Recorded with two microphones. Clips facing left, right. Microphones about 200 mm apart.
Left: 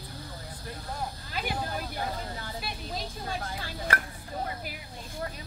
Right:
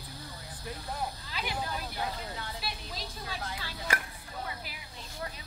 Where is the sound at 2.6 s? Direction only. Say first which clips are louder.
Left 4 dB; 50° left (ahead or behind).